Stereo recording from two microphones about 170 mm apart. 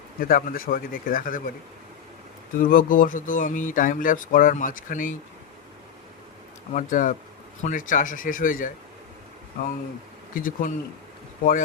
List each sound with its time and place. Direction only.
0.2 s speech: 55° left (ahead or behind)
2.6 s speech: 55° left (ahead or behind)
6.7 s speech: 50° left (ahead or behind)
10.3 s speech: 55° left (ahead or behind)